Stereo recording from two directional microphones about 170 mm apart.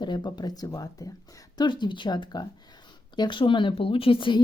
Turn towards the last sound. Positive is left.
turn(degrees=30)  # may be behind; listen again after turning